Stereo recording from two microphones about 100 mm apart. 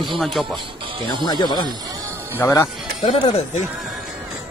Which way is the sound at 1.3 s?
45° left (ahead or behind).